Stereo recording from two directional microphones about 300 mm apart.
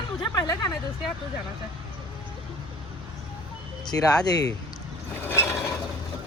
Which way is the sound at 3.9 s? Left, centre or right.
Centre.